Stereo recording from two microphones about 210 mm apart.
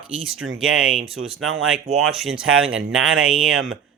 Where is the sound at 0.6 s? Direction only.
5° right (ahead or behind).